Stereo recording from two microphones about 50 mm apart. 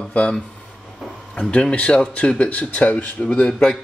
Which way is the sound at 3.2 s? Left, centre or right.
Centre.